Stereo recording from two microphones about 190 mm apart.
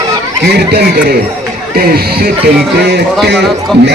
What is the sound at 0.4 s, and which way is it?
Speech, 55° right (ahead or behind).